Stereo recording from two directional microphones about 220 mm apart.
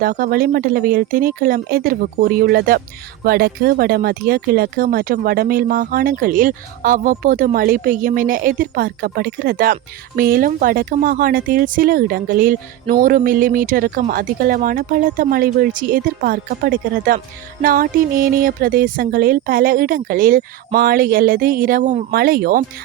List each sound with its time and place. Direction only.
0.0 s speech: 40° right (ahead or behind)